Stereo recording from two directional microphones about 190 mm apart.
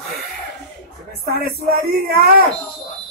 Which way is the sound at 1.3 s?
55° right (ahead or behind).